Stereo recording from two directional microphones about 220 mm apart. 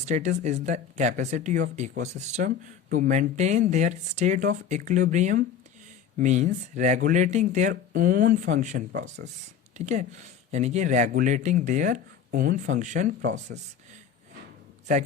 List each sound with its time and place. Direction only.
0.0 s speech: 30° right (ahead or behind)